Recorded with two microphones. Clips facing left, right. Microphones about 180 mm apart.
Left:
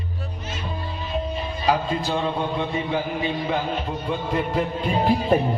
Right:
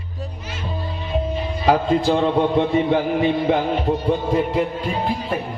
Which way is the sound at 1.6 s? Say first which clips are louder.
Right 6 dB; 55° right (ahead or behind).